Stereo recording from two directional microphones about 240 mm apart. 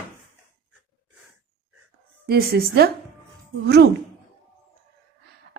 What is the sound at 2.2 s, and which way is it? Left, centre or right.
A woman's voice, right.